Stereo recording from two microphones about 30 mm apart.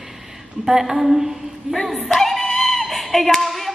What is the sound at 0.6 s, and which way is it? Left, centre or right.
A woman's voice, centre.